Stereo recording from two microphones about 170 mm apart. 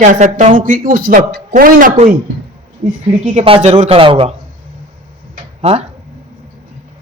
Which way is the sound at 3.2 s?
45° right (ahead or behind).